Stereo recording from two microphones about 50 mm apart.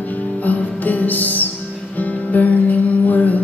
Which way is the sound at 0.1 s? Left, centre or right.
Left.